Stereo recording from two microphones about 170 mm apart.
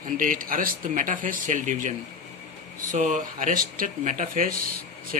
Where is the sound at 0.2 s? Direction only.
55° right (ahead or behind).